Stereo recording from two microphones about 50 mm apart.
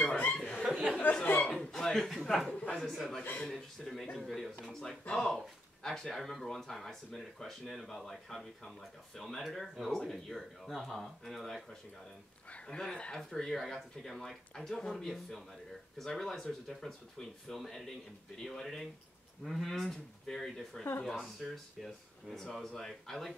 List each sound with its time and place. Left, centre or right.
0.3 s chuckle: centre
0.6 s chuckle: centre
1.1 s chuckle: left
1.5 s chuckle: centre
2.3 s speech: centre
2.9 s speech: centre
12.6 s speech: centre